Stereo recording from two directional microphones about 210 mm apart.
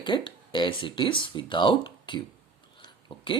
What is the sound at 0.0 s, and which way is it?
Speech, 20° left (ahead or behind).